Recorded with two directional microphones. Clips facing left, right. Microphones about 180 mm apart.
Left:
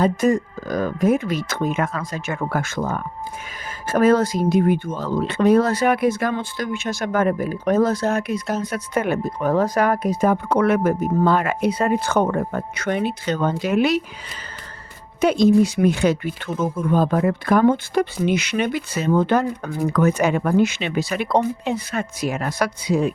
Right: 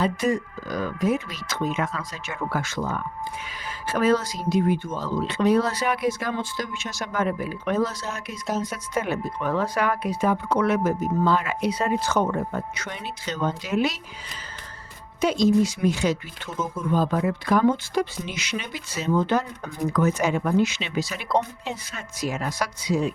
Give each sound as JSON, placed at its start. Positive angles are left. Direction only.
{"t": 0.0, "sound": "speech", "side_deg": 45}
{"t": 15.2, "sound": "speech", "side_deg": 55}